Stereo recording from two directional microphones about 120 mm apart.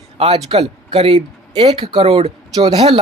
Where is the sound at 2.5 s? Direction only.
40° right (ahead or behind).